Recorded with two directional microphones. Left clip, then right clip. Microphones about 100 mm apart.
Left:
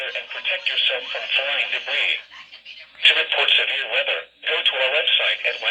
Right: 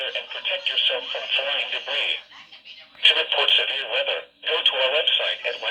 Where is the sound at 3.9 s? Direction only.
35° right (ahead or behind).